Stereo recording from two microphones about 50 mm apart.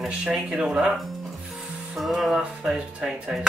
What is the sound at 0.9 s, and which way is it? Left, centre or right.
Speech, centre.